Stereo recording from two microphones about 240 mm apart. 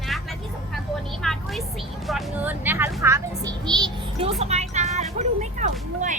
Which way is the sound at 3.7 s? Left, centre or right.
Right.